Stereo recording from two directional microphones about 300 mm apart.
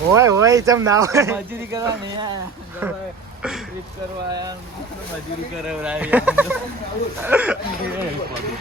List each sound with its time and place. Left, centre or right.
0.1 s speech: centre
4.3 s speech: centre
5.6 s speech: centre